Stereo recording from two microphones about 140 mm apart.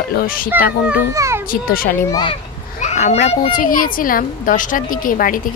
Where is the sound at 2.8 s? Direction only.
55° left (ahead or behind).